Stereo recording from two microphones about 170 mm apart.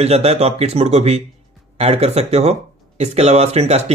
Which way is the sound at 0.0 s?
40° right (ahead or behind).